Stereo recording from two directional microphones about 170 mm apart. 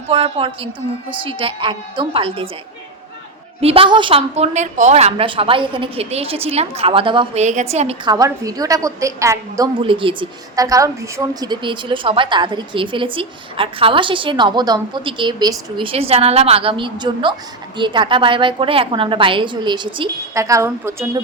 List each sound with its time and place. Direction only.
0.1 s a woman's voice: 30° right (ahead or behind)
3.6 s a woman's voice: 35° right (ahead or behind)
7.4 s a woman's voice: 40° right (ahead or behind)
8.0 s a woman's voice: 20° right (ahead or behind)
9.7 s a woman's voice: 30° right (ahead or behind)